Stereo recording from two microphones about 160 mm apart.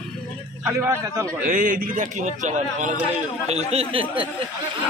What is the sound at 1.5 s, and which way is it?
A man's voice, 55° right (ahead or behind).